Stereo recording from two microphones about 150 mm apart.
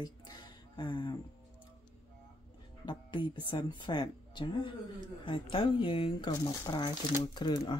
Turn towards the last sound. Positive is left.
turn(degrees=30)  # may be behind; listen again after turning